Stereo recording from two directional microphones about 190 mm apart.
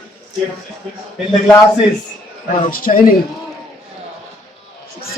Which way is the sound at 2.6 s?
45° left (ahead or behind).